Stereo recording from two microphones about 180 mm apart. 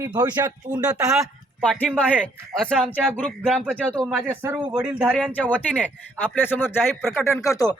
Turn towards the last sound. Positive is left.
turn(degrees=20)  # may be behind; listen again after turning